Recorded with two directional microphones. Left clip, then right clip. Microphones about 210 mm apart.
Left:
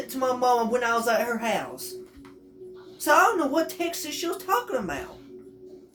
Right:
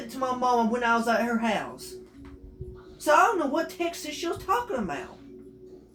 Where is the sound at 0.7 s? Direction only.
30° left (ahead or behind).